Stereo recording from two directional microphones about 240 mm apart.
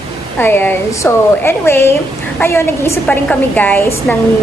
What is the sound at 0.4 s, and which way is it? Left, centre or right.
A woman's voice, centre.